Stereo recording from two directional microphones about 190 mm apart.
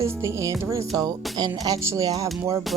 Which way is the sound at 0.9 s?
20° right (ahead or behind).